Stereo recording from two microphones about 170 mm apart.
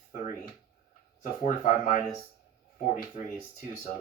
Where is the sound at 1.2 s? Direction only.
50° left (ahead or behind).